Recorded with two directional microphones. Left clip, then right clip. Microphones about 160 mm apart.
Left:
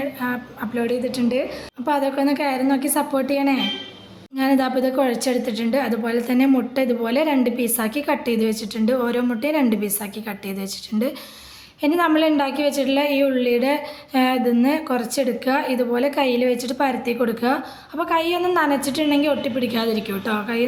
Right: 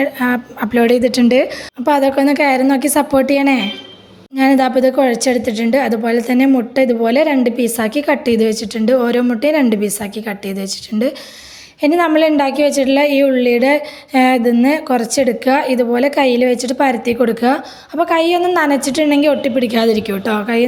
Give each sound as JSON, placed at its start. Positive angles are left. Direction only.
{"t": 0.0, "sound": "a woman's voice", "side_deg": -50}
{"t": 1.8, "sound": "a woman's voice", "side_deg": -45}